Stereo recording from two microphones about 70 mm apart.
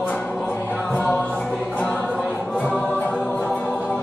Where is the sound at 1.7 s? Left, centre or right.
Left.